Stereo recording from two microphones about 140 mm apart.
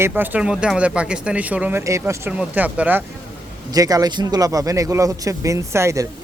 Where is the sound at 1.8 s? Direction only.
20° right (ahead or behind).